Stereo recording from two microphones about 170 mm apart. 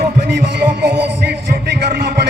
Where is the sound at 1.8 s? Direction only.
70° right (ahead or behind).